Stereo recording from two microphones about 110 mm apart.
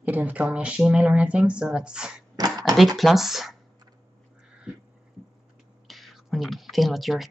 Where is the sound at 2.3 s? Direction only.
35° right (ahead or behind).